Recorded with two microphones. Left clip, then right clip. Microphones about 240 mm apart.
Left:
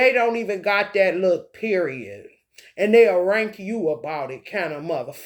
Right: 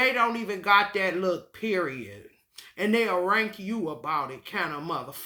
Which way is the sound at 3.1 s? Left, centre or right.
Left.